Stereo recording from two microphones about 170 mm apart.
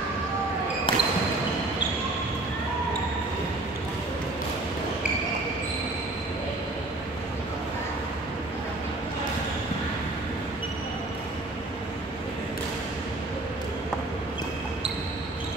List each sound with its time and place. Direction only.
0.9 s basketball bounce: 30° left (ahead or behind)